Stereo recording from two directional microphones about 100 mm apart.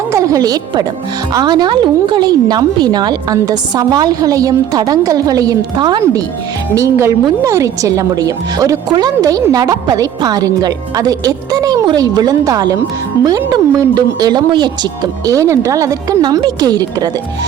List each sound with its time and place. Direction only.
0.1 s a woman's voice: 35° right (ahead or behind)
6.7 s a woman's voice: 30° right (ahead or behind)